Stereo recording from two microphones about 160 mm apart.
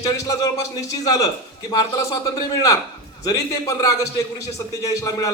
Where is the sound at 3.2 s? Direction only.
20° left (ahead or behind).